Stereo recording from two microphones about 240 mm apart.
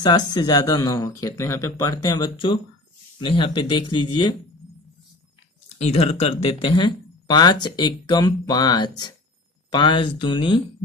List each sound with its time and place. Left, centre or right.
0.0 s speech: centre
5.8 s speech: left